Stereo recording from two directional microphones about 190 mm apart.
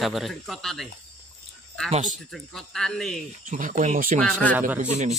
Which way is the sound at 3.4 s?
45° right (ahead or behind).